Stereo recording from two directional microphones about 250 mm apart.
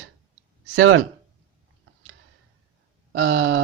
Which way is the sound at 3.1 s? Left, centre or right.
Right.